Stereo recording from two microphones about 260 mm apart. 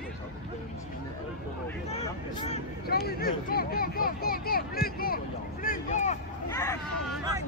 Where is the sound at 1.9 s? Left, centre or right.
Left.